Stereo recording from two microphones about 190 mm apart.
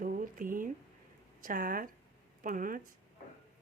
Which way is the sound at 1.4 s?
45° right (ahead or behind).